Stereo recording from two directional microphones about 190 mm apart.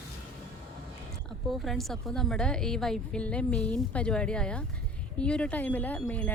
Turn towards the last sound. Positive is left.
turn(degrees=10)  # may be behind; listen again after turning